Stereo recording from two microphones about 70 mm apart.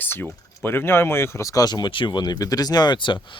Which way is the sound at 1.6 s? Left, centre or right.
Left.